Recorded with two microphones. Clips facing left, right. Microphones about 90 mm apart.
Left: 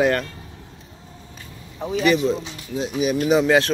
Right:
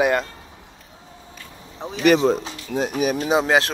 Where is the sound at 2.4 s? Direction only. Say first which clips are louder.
Right 3 dB; 50° right (ahead or behind).